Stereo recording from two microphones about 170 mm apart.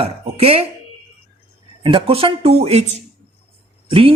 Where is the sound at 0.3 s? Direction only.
35° right (ahead or behind).